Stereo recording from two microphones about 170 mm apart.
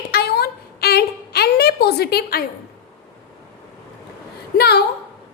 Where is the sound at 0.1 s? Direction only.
70° left (ahead or behind).